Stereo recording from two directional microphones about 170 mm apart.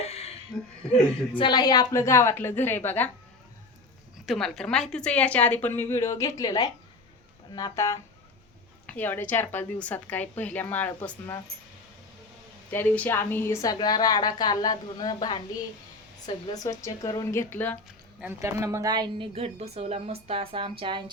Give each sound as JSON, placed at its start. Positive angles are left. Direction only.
{"t": 0.0, "sound": "a sound", "side_deg": 35}
{"t": 1.4, "sound": "a woman's voice", "side_deg": 25}
{"t": 4.3, "sound": "a woman's voice", "side_deg": 5}
{"t": 12.7, "sound": "a woman's voice", "side_deg": 10}
{"t": 18.2, "sound": "speech", "side_deg": -15}